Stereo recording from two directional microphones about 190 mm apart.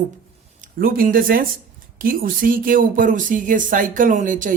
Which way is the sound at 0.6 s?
45° right (ahead or behind).